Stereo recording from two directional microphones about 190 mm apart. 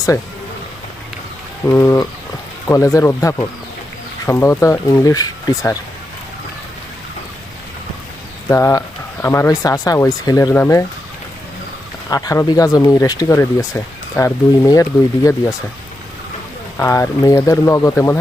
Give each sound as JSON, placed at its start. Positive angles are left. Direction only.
{"t": 1.6, "sound": "speech", "side_deg": 15}
{"t": 8.4, "sound": "speech", "side_deg": 15}
{"t": 12.1, "sound": "speech", "side_deg": 20}
{"t": 16.7, "sound": "speech", "side_deg": 15}